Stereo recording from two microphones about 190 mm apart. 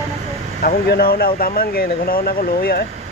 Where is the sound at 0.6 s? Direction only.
50° left (ahead or behind).